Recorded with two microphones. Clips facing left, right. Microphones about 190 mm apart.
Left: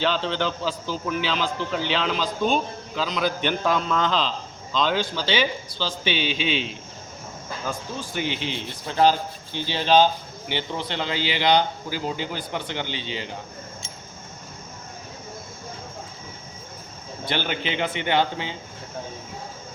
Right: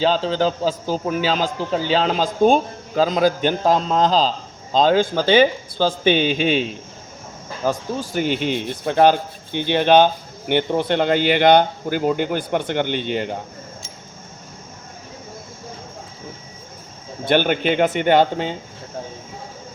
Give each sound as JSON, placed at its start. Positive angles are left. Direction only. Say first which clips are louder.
{"t": 0.0, "sound": "a man's voice", "louder": "right 6 dB", "side_deg": -40}
{"t": 8.1, "sound": "speech", "louder": "right 8 dB", "side_deg": -50}
{"t": 17.2, "sound": "a man's voice", "louder": "right 10 dB", "side_deg": -55}